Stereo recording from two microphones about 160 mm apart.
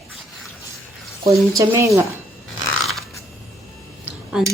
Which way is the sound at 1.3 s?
20° right (ahead or behind).